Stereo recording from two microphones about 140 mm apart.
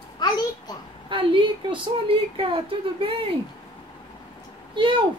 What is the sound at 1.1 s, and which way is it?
A woman's voice, 35° right (ahead or behind).